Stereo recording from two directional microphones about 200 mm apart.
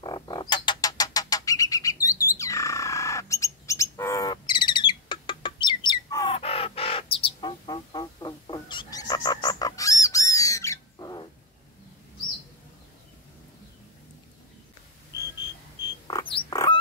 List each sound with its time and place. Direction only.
0.0 s duck: 20° left (ahead or behind)
6.3 s bird: 30° left (ahead or behind)
16.1 s a sound: 25° left (ahead or behind)